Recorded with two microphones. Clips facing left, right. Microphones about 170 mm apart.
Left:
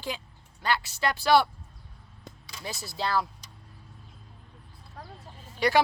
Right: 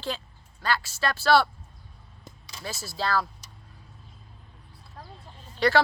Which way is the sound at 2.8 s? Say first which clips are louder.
Right 1 dB; 20° left (ahead or behind).